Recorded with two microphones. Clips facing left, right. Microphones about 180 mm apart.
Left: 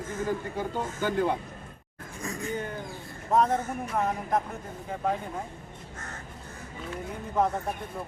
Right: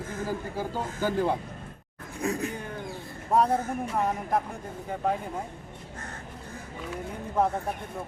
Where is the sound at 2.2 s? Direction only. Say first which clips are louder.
Right 6 dB; 60° right (ahead or behind).